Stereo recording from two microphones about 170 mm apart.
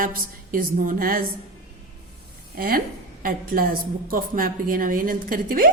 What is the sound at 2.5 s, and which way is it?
A woman's voice, 60° right (ahead or behind).